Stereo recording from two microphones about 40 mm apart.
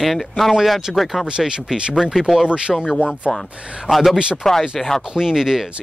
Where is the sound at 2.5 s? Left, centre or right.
Right.